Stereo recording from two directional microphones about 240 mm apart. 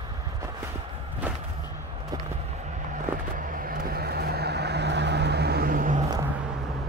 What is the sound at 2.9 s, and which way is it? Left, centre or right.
Vehicle, right.